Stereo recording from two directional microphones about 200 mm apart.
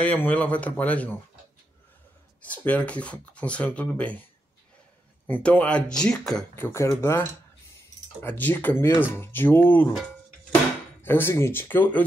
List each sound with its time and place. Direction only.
0.0 s speech: 5° left (ahead or behind)
2.4 s speech: 5° left (ahead or behind)
5.2 s speech: 10° left (ahead or behind)